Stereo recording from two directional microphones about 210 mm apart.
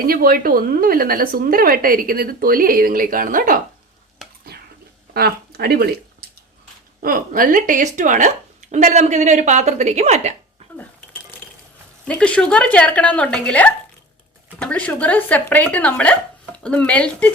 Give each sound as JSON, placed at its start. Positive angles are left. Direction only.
{"t": 0.1, "sound": "a woman's voice", "side_deg": -45}
{"t": 4.2, "sound": "a sound", "side_deg": 0}
{"t": 5.1, "sound": "speech", "side_deg": -50}
{"t": 12.0, "sound": "speech", "side_deg": 5}